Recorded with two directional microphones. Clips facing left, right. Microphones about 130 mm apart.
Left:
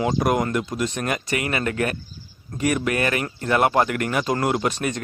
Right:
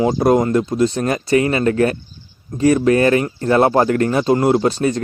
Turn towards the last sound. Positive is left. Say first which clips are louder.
# right 8 dB
turn(degrees=-30)  # may be behind; listen again after turning